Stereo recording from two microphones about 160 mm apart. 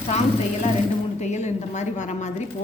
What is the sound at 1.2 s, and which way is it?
A woman's voice, 45° left (ahead or behind).